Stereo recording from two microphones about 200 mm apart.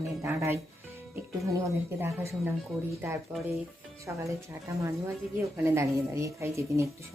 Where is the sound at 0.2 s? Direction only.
10° right (ahead or behind).